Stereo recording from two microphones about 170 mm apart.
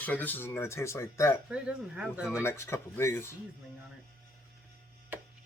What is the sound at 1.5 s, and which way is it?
Speech, 5° right (ahead or behind).